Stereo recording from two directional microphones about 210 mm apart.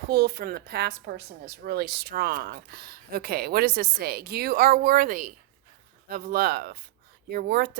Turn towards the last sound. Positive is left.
turn(degrees=-50)  # may be behind; listen again after turning